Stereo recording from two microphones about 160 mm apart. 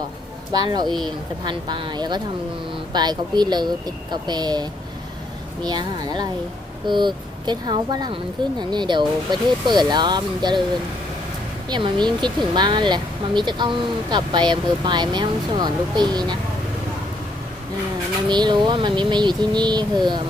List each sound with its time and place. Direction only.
0.6 s speech: 25° right (ahead or behind)
11.7 s speech: 30° right (ahead or behind)
18.3 s speech: 30° right (ahead or behind)